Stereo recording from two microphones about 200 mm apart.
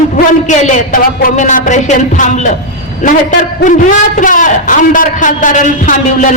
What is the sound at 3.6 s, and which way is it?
A man's voice, 40° left (ahead or behind).